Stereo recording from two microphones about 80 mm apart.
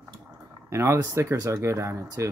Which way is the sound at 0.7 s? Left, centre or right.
Right.